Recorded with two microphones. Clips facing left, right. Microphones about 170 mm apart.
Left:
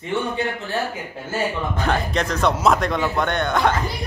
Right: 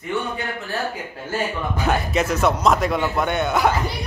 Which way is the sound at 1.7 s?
5° right (ahead or behind).